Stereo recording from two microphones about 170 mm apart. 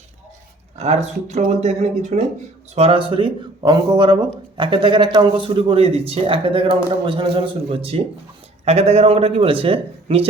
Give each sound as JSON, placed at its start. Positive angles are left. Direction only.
{"t": 0.8, "sound": "speech", "side_deg": -40}